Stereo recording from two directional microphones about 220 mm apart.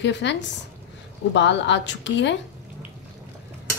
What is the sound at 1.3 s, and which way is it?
A woman's voice, 55° left (ahead or behind).